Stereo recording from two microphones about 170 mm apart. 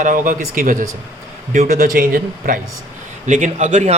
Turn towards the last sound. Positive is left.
turn(degrees=-45)  # may be behind; listen again after turning